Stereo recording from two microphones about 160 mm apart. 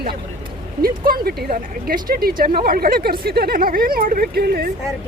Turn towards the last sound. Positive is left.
turn(degrees=-70)  # may be behind; listen again after turning